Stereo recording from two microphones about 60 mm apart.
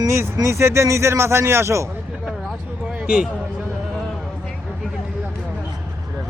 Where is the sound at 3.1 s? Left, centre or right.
Centre.